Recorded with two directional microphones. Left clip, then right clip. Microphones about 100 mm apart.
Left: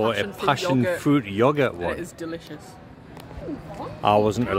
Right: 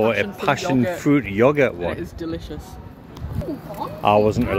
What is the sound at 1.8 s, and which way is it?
Speech, 40° left (ahead or behind).